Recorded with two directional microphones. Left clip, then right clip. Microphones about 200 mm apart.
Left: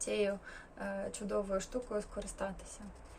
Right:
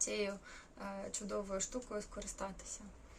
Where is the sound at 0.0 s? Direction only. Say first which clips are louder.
Left 5 dB; 15° right (ahead or behind).